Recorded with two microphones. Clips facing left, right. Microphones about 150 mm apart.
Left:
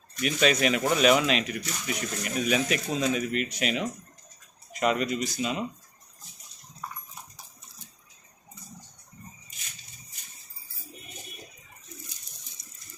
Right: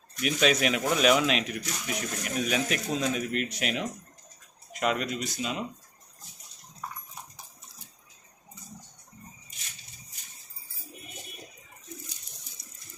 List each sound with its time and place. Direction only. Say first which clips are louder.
0.2 s speech: left 1 dB; centre (ahead or behind)
12.6 s water: right 1 dB; 60° right (ahead or behind)